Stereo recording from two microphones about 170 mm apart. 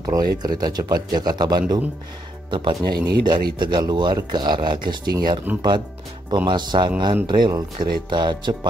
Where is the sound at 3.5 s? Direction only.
25° right (ahead or behind).